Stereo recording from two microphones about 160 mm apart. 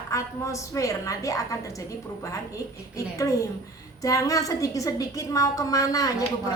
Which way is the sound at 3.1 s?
20° left (ahead or behind).